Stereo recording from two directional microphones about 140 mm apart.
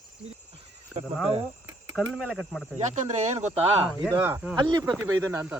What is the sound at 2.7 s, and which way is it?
Speech, 55° right (ahead or behind).